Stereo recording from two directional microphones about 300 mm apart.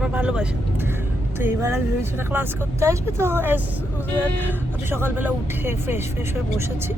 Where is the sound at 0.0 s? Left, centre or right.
Centre.